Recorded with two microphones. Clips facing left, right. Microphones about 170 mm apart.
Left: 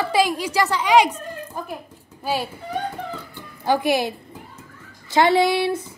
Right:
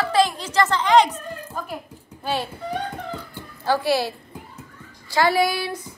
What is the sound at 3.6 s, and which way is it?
Speech, 15° left (ahead or behind).